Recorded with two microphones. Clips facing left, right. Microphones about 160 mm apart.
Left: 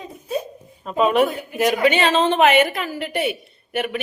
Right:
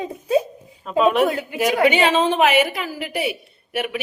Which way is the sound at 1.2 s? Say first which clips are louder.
Right 4 dB; 90° right.